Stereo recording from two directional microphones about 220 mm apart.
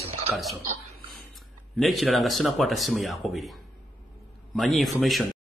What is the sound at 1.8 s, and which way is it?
Speech, centre (ahead or behind).